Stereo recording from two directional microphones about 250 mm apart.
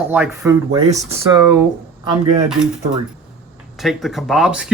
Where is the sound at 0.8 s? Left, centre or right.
Right.